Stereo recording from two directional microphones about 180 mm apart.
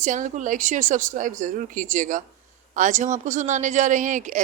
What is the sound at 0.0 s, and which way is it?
A woman's voice, 45° right (ahead or behind).